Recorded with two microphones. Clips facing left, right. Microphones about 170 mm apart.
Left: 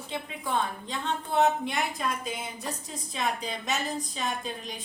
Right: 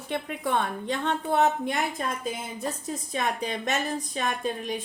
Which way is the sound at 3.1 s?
55° right (ahead or behind).